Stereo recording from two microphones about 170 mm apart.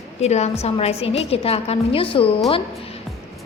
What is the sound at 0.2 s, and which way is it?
A woman's voice, 40° left (ahead or behind).